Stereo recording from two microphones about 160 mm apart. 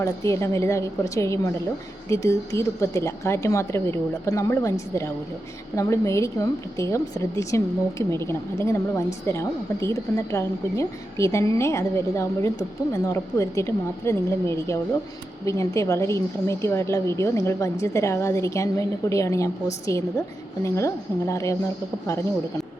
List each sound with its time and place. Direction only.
0.0 s a woman's voice: 15° left (ahead or behind)